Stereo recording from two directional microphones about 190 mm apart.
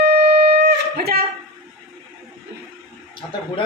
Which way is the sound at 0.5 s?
55° right (ahead or behind).